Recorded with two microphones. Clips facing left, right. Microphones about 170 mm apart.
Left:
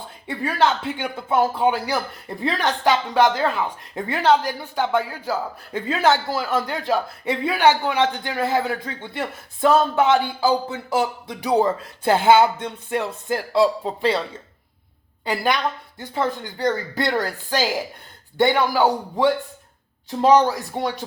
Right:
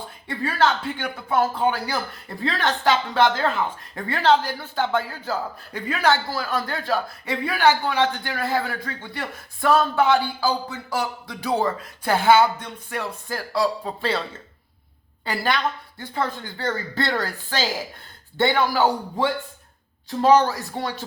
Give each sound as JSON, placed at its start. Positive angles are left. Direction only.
{"t": 0.4, "sound": "speech", "side_deg": 15}
{"t": 15.2, "sound": "a woman's voice", "side_deg": 15}